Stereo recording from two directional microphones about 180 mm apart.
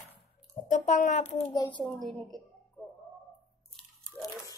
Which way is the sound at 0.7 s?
40° left (ahead or behind).